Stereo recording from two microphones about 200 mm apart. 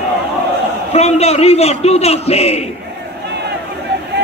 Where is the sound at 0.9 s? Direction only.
30° left (ahead or behind).